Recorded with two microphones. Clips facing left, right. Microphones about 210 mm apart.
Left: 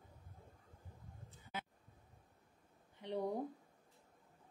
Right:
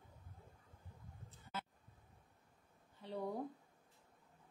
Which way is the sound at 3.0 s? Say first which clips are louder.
Left 3 dB; 20° left (ahead or behind).